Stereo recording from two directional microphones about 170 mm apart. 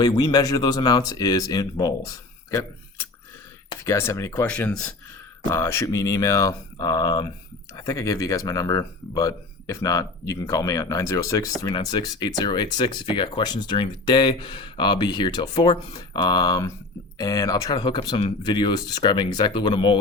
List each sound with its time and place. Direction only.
0.0 s speech: 25° left (ahead or behind)
4.4 s speech: 5° left (ahead or behind); by 20.0 s 25° left (ahead or behind)